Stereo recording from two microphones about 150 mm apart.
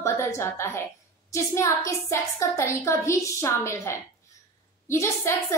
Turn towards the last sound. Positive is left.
turn(degrees=20)  # may be behind; listen again after turning